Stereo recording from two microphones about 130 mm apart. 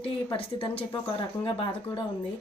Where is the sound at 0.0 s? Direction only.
45° left (ahead or behind).